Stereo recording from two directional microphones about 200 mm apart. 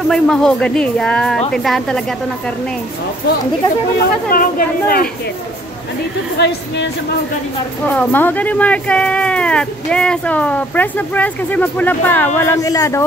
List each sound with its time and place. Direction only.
0.1 s speech: 5° left (ahead or behind)
4.3 s speech: 45° left (ahead or behind)
6.3 s a woman's voice: 60° left (ahead or behind)
7.8 s speech: 5° left (ahead or behind)